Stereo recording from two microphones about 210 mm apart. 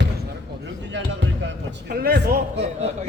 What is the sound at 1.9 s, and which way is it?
Speech, 45° right (ahead or behind).